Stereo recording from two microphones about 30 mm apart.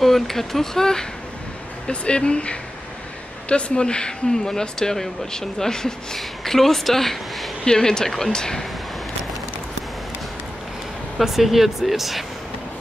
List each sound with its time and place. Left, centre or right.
0.0 s speech: centre
1.9 s speech: left
4.5 s speech: centre
6.1 s speech: centre
7.6 s speech: left
11.1 s speech: centre